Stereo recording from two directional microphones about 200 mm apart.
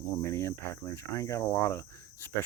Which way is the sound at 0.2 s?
15° left (ahead or behind).